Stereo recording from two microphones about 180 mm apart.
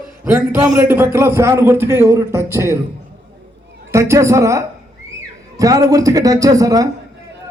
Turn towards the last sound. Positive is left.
turn(degrees=-20)  # may be behind; listen again after turning